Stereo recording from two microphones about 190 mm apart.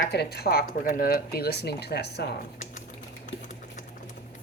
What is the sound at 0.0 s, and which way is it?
Speech, 60° left (ahead or behind).